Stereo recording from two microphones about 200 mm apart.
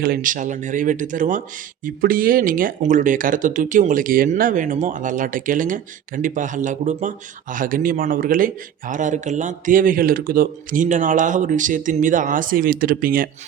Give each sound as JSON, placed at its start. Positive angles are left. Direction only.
{"t": 0.0, "sound": "a man's voice", "side_deg": -45}